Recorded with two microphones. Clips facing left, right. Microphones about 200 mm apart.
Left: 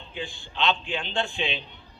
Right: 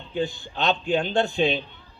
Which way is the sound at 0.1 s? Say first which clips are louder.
Right 10 dB; 40° right (ahead or behind).